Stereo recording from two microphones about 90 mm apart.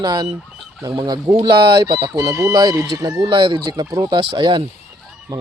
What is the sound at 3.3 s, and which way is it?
Speech, 65° right (ahead or behind).